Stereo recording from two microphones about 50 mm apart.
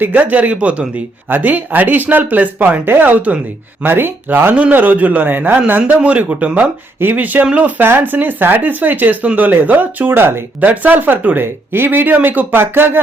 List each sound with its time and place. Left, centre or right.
0.0 s speech: right
4.5 s speech: right
6.0 s speech: right
10.7 s speech: right